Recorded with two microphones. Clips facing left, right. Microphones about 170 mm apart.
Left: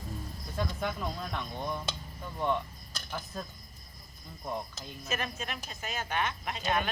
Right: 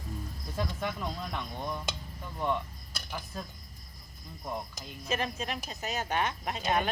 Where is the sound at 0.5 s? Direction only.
Centre (ahead or behind).